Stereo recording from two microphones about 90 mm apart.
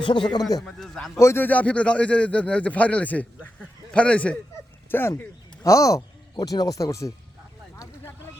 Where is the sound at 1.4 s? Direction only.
15° left (ahead or behind).